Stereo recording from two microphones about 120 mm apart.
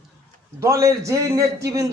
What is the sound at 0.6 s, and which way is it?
A man's voice, 25° right (ahead or behind).